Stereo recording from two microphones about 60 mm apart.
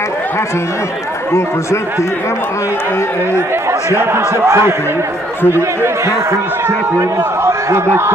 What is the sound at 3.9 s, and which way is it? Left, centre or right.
Speech, right.